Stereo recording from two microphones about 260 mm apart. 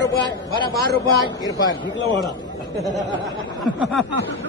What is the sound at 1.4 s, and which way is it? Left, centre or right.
Speech, centre.